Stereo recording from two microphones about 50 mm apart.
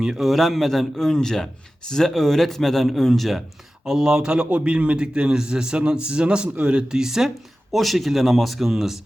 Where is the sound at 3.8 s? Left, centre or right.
Centre.